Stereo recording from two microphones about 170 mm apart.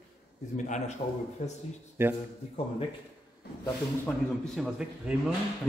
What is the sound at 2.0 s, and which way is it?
Speech, 15° right (ahead or behind).